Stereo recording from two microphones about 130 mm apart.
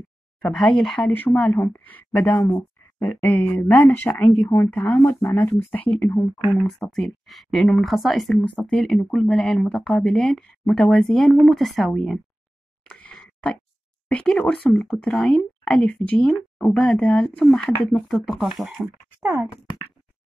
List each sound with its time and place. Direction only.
0.4 s speech: 5° left (ahead or behind)
6.6 s speech: centre (ahead or behind)
12.8 s a sound: 10° left (ahead or behind)
14.1 s speech: 5° left (ahead or behind)